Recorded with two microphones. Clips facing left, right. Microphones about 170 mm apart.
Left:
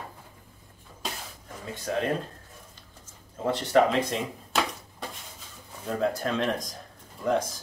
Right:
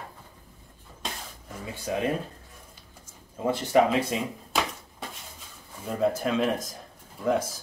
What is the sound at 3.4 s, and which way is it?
Speech, 10° right (ahead or behind).